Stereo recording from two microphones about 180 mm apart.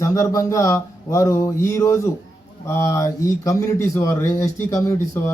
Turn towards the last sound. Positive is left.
turn(degrees=15)  # may be behind; listen again after turning